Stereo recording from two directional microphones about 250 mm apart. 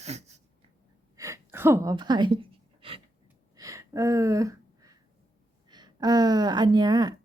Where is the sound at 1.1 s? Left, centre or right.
Centre.